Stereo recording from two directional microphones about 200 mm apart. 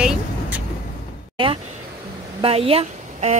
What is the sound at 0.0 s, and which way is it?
Vehicle, 5° right (ahead or behind).